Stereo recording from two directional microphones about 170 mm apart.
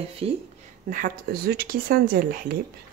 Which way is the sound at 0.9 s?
55° right (ahead or behind).